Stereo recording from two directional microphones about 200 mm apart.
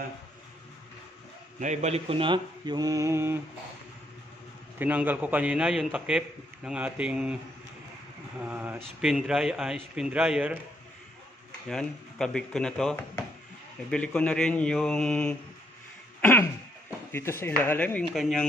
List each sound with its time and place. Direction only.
1.6 s speech: 35° right (ahead or behind); by 3.3 s 15° right (ahead or behind)
4.7 s a man's voice: 10° right (ahead or behind)
8.4 s a man's voice: 10° right (ahead or behind)
11.7 s a man's voice: centre (ahead or behind)
16.2 s throat clearing: 10° left (ahead or behind)
17.1 s a man's voice: 10° left (ahead or behind)